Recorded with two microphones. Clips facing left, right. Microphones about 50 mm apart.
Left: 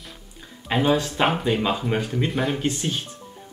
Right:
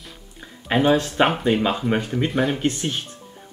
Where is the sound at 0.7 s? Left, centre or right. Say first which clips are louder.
Right 3 dB; centre.